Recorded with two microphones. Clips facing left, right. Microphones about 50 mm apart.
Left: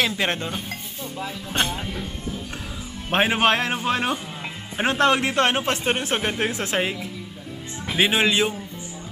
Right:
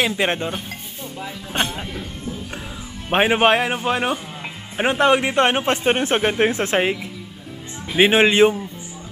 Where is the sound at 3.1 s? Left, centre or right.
Centre.